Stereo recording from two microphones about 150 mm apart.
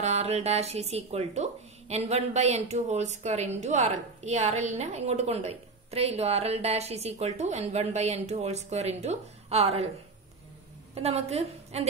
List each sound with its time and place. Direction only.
0.0 s speech: 45° right (ahead or behind)
11.0 s speech: 45° right (ahead or behind)